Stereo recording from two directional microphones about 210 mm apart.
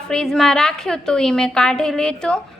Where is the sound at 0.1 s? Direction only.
5° left (ahead or behind).